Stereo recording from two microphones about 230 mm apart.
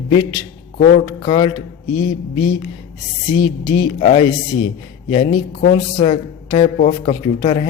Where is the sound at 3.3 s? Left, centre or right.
Left.